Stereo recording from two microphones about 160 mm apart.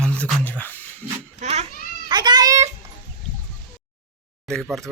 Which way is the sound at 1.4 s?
45° right (ahead or behind).